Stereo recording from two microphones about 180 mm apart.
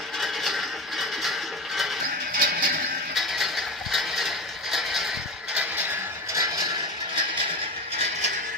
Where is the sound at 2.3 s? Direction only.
55° right (ahead or behind).